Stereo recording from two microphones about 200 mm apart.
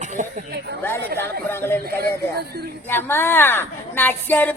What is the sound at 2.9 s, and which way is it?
A woman's voice, 10° left (ahead or behind).